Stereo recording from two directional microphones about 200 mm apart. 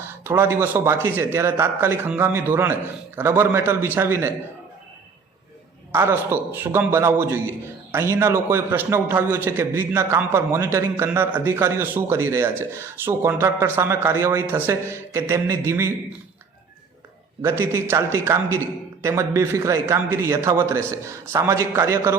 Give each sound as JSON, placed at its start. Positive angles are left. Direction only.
{"t": 0.1, "sound": "a man's voice", "side_deg": -10}
{"t": 5.9, "sound": "a man's voice", "side_deg": -10}
{"t": 17.4, "sound": "a man's voice", "side_deg": -15}